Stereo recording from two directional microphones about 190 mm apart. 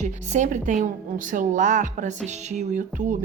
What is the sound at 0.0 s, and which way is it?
A woman's voice, 40° right (ahead or behind).